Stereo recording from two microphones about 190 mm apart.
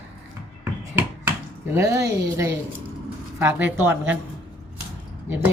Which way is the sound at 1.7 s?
15° right (ahead or behind).